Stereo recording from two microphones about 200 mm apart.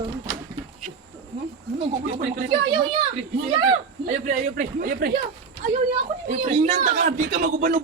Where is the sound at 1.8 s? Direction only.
30° right (ahead or behind).